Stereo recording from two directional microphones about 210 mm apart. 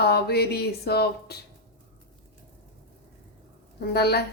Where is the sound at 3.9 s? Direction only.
50° left (ahead or behind).